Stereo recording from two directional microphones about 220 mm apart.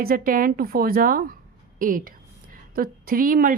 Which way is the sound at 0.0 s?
40° right (ahead or behind).